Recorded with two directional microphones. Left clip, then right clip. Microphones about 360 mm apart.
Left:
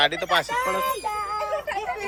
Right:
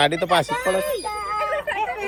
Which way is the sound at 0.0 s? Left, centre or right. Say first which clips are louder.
Right 3 dB; centre.